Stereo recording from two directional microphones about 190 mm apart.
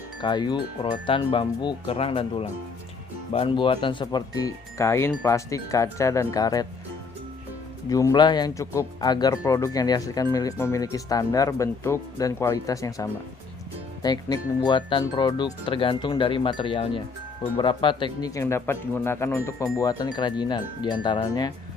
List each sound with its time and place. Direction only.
0.2 s speech: 25° left (ahead or behind)
7.9 s speech: 20° left (ahead or behind)